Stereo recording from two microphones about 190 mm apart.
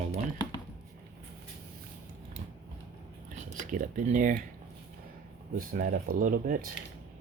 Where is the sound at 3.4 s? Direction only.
40° right (ahead or behind).